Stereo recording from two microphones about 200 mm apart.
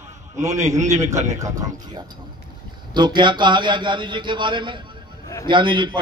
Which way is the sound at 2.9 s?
20° right (ahead or behind).